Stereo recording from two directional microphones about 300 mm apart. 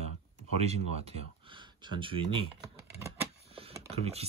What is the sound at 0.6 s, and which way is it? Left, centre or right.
Speech, right.